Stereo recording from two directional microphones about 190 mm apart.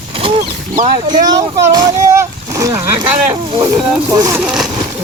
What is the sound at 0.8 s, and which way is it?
Speech, 30° right (ahead or behind).